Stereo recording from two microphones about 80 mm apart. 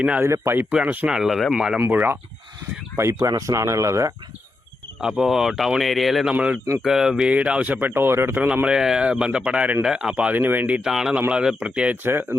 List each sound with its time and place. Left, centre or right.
0.2 s speech: right
0.7 s speech: centre
1.1 s speech: centre
1.9 s speech: right
3.0 s speech: right
4.9 s speech: centre
6.3 s speech: centre
6.8 s speech: centre; by 8.4 s right
8.4 s speech: centre
10.8 s speech: centre
12.0 s speech: right